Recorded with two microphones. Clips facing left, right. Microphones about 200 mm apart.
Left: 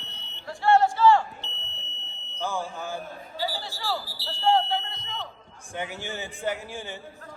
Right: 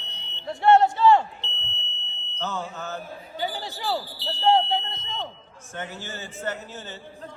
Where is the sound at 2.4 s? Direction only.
10° left (ahead or behind).